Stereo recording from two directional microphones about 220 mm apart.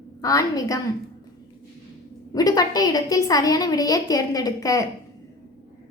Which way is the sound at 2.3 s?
15° left (ahead or behind).